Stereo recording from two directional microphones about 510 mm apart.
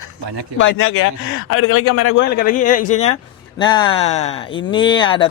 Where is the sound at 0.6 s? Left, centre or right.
Left.